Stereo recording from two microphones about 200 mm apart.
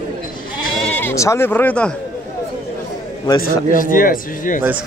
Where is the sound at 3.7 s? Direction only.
45° left (ahead or behind).